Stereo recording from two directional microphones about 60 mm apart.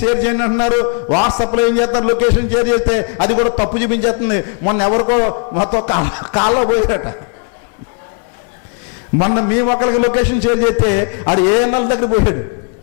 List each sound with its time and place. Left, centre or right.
0.2 s a man's voice: centre
1.1 s a man's voice: centre
9.1 s a man's voice: centre